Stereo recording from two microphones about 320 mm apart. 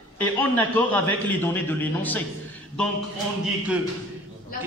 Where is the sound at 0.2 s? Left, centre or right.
Centre.